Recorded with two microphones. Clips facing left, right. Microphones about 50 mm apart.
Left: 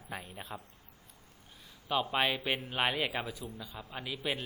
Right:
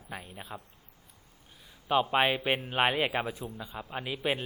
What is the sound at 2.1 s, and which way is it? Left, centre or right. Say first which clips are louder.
A man's voice: right 5 dB; right.